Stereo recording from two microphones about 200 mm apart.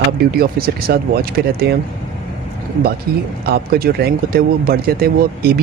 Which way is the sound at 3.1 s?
50° right (ahead or behind).